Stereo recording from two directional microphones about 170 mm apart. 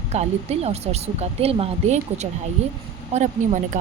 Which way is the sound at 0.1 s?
40° right (ahead or behind).